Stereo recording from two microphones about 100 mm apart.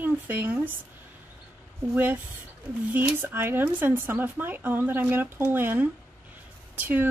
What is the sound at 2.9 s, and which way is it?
A woman's voice, 20° right (ahead or behind).